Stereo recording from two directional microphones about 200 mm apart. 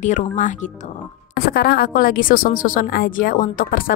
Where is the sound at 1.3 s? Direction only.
50° left (ahead or behind).